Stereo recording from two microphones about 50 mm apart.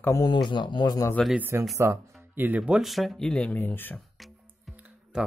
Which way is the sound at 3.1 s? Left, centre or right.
Centre.